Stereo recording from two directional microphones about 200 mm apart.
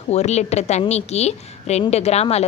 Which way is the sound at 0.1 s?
35° left (ahead or behind).